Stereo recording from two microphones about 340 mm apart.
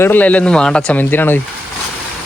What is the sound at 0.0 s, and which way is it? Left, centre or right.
Speech, centre.